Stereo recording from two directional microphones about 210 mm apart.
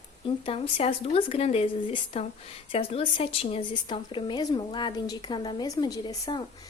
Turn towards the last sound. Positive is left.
turn(degrees=20)  # may be behind; listen again after turning